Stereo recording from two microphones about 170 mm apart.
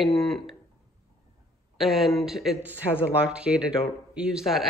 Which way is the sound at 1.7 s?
Centre (ahead or behind).